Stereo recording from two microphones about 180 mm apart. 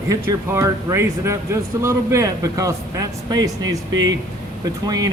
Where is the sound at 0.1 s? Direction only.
15° right (ahead or behind).